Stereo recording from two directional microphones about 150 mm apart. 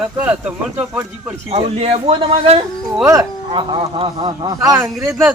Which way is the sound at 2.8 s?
5° right (ahead or behind).